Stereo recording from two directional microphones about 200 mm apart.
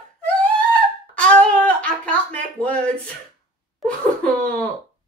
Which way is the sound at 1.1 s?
5° left (ahead or behind).